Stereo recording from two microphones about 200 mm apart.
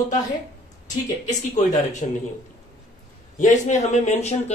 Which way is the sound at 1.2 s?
35° left (ahead or behind).